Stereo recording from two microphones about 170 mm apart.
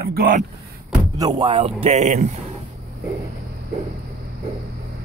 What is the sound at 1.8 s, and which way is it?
Speech, 40° right (ahead or behind).